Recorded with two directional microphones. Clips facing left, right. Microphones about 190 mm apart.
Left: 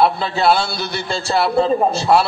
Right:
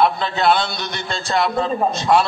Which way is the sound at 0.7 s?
30° left (ahead or behind).